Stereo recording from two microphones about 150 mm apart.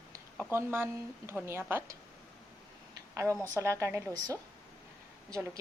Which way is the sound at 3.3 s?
10° left (ahead or behind).